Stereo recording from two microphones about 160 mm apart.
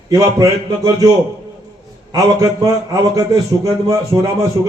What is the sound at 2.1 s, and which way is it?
A man's voice, 20° right (ahead or behind).